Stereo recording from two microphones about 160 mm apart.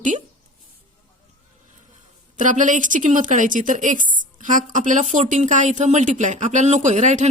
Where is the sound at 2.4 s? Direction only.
55° right (ahead or behind).